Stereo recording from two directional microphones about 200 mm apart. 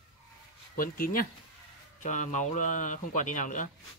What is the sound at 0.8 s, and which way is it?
A man's voice, 45° left (ahead or behind).